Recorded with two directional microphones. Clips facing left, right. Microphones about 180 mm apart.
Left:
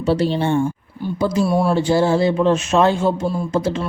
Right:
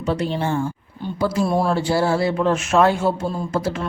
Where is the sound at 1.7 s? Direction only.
20° left (ahead or behind).